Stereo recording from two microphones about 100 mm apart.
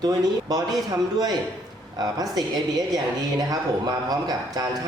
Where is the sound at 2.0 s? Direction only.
40° right (ahead or behind).